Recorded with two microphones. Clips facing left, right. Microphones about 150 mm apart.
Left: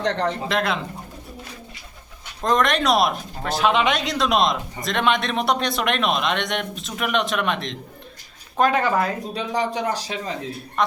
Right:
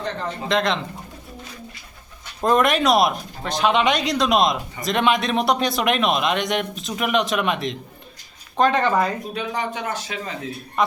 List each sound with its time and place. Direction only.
0.0 s speech: 80° left
0.4 s speech: 5° left (ahead or behind)
2.4 s speech: 5° right (ahead or behind)
8.5 s speech: 5° left (ahead or behind)
9.3 s a man's voice: 35° left (ahead or behind)
10.8 s speech: 5° right (ahead or behind)